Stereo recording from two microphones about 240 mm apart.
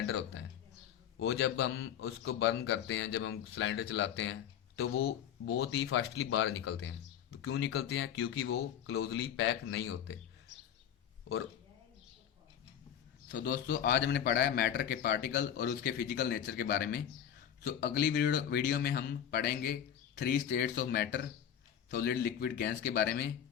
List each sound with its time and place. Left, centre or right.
0.0 s a man's voice: left
13.2 s a man's voice: left